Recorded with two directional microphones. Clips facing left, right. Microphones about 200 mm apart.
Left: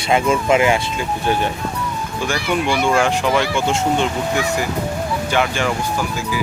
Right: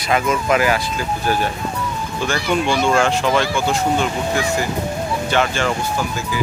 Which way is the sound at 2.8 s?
15° left (ahead or behind).